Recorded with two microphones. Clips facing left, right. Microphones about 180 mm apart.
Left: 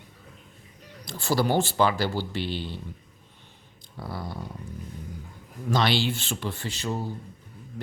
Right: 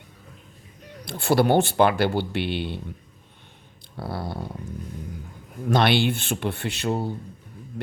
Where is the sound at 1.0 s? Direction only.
60° right (ahead or behind).